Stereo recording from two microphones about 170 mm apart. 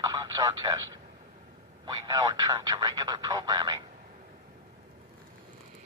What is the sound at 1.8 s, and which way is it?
Speech, 25° right (ahead or behind).